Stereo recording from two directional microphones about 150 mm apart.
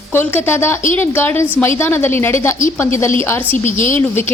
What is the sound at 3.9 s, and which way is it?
Speech, 15° left (ahead or behind).